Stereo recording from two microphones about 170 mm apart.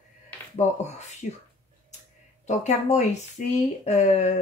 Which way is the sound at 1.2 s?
50° left (ahead or behind).